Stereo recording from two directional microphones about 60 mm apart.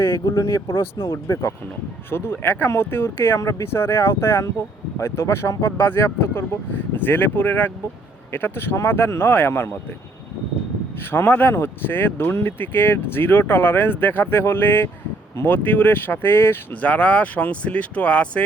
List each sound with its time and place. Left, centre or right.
0.3 s speech: left
2.0 s speech: left
11.1 s speech: left
16.8 s speech: left